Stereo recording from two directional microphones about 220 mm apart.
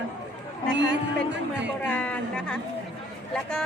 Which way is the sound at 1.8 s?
5° left (ahead or behind).